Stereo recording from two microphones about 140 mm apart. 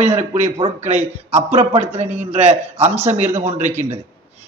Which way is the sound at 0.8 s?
55° right (ahead or behind).